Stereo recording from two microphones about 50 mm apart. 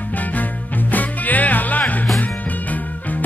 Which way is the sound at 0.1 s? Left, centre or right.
Left.